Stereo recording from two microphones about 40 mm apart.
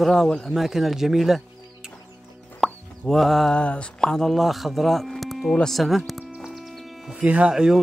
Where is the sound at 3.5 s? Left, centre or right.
Left.